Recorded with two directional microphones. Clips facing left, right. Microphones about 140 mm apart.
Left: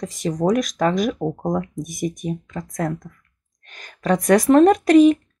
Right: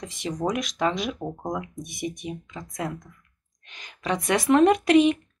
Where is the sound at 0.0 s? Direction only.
40° left (ahead or behind).